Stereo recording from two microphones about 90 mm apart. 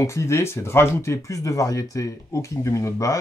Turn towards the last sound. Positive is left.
turn(degrees=35)  # may be behind; listen again after turning